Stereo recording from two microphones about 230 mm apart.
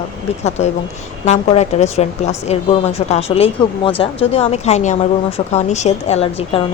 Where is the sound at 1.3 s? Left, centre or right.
Left.